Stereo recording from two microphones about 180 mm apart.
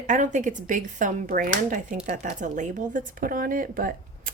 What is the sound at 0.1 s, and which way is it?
Speech, 45° right (ahead or behind).